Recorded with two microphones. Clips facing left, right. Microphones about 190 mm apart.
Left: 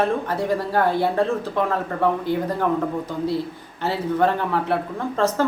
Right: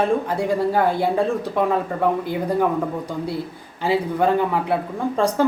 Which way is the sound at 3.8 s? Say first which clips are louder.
Right 1 dB; 10° right (ahead or behind).